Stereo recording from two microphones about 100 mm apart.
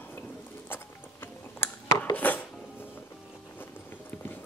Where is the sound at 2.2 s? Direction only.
15° left (ahead or behind).